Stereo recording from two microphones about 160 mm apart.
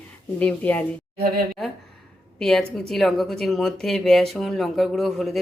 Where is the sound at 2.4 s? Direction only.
Centre (ahead or behind).